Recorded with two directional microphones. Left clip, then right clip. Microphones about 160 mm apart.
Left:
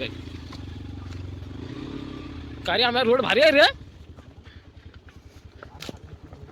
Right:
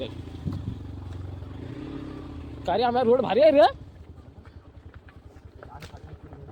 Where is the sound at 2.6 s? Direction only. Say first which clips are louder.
Left 1 dB; 20° right (ahead or behind).